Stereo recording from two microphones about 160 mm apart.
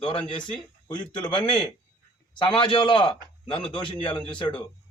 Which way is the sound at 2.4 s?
30° left (ahead or behind).